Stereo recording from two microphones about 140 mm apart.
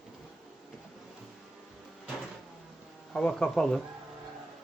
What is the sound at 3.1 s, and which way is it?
Speech, 5° left (ahead or behind).